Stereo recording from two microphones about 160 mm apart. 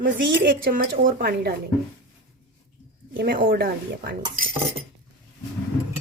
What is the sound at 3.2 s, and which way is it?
Speech, 80° right.